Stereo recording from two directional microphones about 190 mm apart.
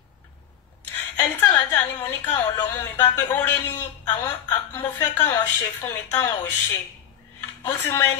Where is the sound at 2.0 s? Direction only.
20° left (ahead or behind).